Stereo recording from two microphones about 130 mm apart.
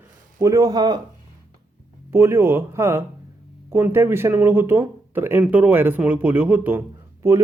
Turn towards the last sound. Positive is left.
turn(degrees=-20)  # may be behind; listen again after turning